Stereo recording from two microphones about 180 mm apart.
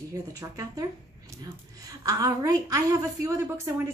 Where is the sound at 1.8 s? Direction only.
20° right (ahead or behind).